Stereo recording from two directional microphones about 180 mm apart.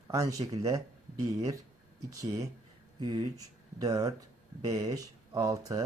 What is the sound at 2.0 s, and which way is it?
Speech, 20° right (ahead or behind).